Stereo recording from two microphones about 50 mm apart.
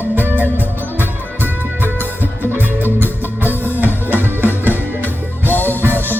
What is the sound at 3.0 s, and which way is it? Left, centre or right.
Music, right.